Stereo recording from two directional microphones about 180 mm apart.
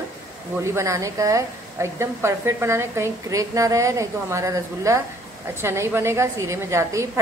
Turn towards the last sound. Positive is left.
turn(degrees=-15)  # may be behind; listen again after turning